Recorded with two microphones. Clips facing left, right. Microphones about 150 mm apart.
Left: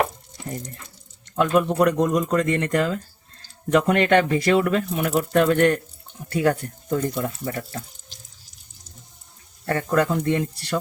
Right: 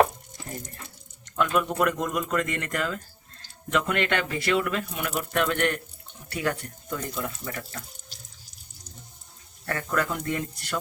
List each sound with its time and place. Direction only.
1.4 s speech: 35° left (ahead or behind)
9.6 s speech: 30° left (ahead or behind)